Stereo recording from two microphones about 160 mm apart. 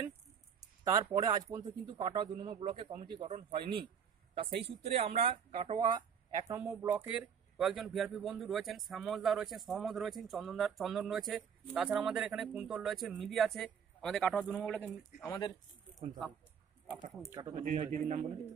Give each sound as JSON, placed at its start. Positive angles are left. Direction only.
{"t": 0.8, "sound": "speech", "side_deg": -25}
{"t": 3.3, "sound": "a man's voice", "side_deg": -45}
{"t": 16.8, "sound": "speech", "side_deg": -15}
{"t": 17.6, "sound": "speech", "side_deg": -55}